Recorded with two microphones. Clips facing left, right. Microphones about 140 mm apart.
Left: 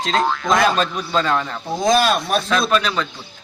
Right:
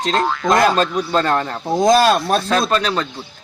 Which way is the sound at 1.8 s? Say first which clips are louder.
Right 4 dB; 35° right (ahead or behind).